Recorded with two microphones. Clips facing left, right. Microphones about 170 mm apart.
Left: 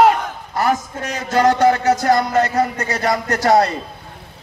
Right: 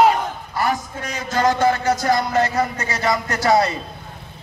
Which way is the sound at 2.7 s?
60° left (ahead or behind).